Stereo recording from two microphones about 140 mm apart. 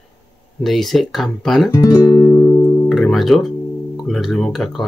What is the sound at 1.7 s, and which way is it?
Speech, 20° left (ahead or behind).